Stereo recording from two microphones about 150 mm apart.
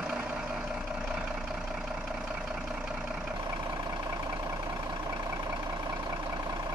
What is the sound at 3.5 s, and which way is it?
Vehicle, 25° right (ahead or behind).